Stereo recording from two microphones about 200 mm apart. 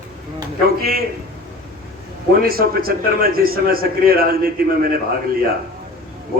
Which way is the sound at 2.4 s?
50° right (ahead or behind).